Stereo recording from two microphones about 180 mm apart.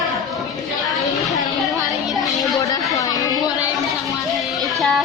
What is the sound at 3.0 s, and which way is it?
Chatter, 20° left (ahead or behind).